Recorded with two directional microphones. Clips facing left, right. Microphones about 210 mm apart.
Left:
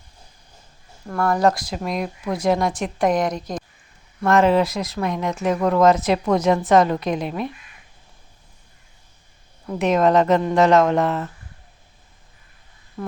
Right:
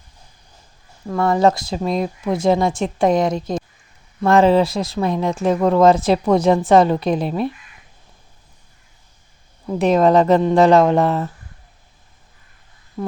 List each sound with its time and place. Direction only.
1.1 s speech: 25° right (ahead or behind)
9.6 s speech: 35° right (ahead or behind)